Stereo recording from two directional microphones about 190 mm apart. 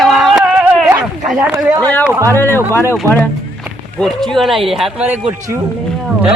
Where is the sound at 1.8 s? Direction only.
10° left (ahead or behind).